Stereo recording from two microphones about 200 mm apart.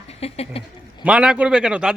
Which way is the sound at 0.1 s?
30° left (ahead or behind).